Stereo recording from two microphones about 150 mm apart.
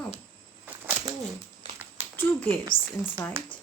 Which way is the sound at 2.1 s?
15° left (ahead or behind).